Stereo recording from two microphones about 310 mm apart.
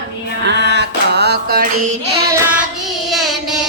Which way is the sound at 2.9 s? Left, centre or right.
Centre.